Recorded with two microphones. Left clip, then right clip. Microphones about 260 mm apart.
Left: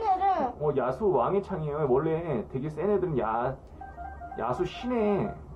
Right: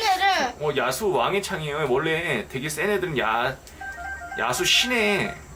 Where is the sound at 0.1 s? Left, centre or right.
Centre.